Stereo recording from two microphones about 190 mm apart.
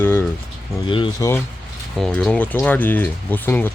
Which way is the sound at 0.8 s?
25° left (ahead or behind).